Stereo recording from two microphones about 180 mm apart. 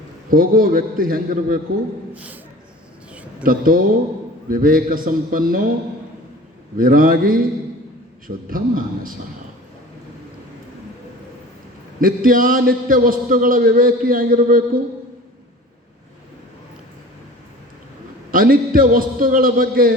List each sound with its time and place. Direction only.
0.3 s a man's voice: 50° right (ahead or behind)
2.1 s a sound: 10° right (ahead or behind)
3.4 s a man's voice: 50° right (ahead or behind)
6.7 s a man's voice: 50° right (ahead or behind)
8.4 s a man's voice: 50° right (ahead or behind)
11.9 s a man's voice: 50° right (ahead or behind)
18.3 s a man's voice: 55° right (ahead or behind)